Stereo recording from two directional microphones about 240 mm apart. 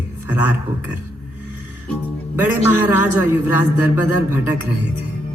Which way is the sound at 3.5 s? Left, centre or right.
Left.